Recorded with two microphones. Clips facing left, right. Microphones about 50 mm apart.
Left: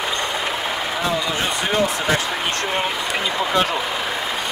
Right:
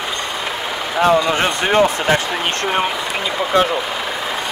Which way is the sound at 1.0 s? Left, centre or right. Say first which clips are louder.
Right 10 dB; right.